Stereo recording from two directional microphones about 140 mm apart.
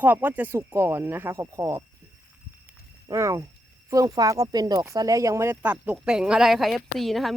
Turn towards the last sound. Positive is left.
turn(degrees=0)  # may be behind; listen again after turning